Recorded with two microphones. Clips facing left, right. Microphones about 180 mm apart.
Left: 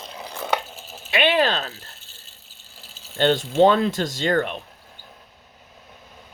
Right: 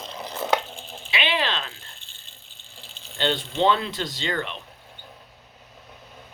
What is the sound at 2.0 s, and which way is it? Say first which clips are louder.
Water: left 1 dB; 5° left (ahead or behind).